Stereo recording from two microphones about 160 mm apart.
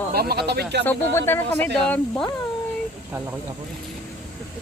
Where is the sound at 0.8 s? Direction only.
15° left (ahead or behind).